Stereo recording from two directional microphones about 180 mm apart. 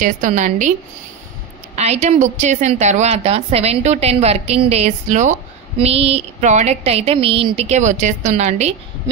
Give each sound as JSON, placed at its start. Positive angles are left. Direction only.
{"t": 0.0, "sound": "a woman's voice", "side_deg": -45}
{"t": 1.8, "sound": "a woman's voice", "side_deg": -40}